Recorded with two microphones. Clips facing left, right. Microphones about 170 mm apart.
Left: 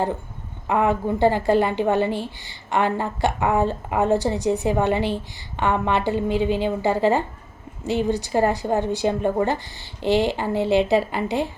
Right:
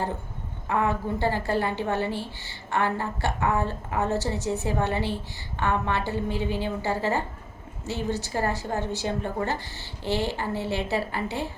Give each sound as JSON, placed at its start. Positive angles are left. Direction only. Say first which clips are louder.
{"t": 0.7, "sound": "a woman's voice", "louder": "left 5 dB", "side_deg": 20}